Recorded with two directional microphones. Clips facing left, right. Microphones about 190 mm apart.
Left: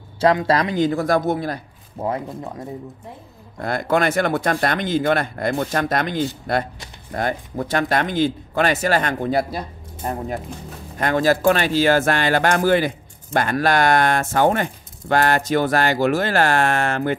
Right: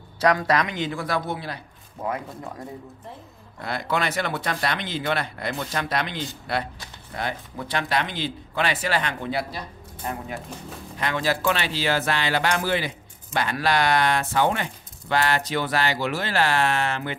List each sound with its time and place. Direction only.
0.2 s speech: 25° left (ahead or behind); by 1.6 s 45° left (ahead or behind)
2.0 s speech: 30° left (ahead or behind)
3.6 s speech: 50° left (ahead or behind)